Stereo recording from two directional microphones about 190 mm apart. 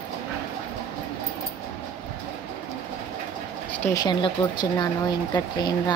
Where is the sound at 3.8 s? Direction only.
20° left (ahead or behind).